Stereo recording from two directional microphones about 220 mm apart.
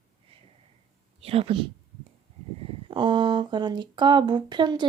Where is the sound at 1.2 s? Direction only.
25° right (ahead or behind).